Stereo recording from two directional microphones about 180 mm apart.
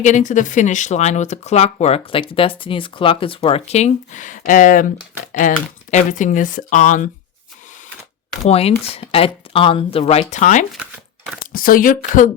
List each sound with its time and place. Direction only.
0.0 s speech: 45° left (ahead or behind)
8.4 s speech: 35° left (ahead or behind)